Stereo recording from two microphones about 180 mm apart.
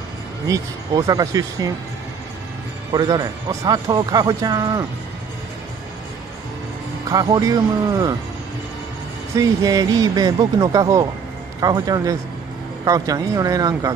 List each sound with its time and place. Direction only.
0.5 s speech: 20° right (ahead or behind)
2.9 s speech: 25° right (ahead or behind)
7.1 s speech: 20° right (ahead or behind)
9.3 s speech: 20° right (ahead or behind)